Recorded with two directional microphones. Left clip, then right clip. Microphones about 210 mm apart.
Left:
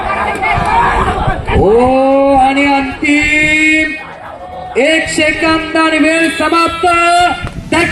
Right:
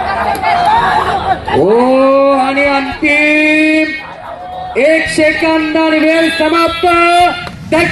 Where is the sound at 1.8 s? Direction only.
30° right (ahead or behind).